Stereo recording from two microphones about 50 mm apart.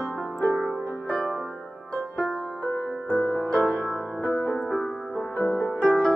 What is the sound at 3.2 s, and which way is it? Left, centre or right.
Music, centre.